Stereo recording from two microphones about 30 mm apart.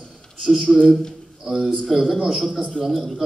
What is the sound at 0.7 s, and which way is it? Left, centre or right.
Speech, centre.